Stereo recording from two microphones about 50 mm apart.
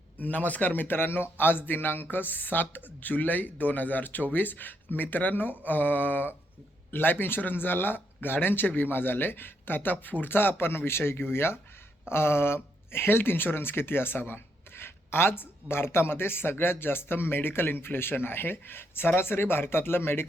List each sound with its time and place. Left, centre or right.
0.2 s a man's voice: left